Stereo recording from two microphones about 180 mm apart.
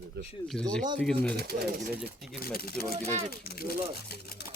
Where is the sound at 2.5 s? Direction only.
55° left (ahead or behind).